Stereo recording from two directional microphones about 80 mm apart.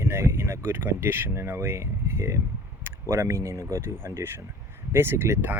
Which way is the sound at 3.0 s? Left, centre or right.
Right.